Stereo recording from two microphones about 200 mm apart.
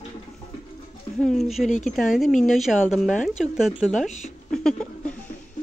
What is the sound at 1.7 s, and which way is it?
Speech, 40° left (ahead or behind).